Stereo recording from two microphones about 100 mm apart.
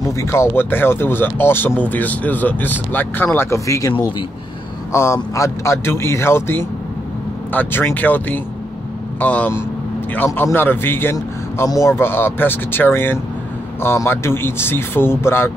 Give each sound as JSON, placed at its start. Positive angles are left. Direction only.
{"t": 0.2, "sound": "speech", "side_deg": 25}
{"t": 4.9, "sound": "speech", "side_deg": 30}